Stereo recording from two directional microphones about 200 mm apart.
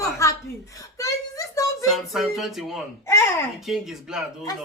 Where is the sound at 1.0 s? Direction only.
15° left (ahead or behind).